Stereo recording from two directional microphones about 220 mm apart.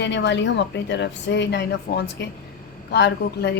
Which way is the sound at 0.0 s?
55° left (ahead or behind).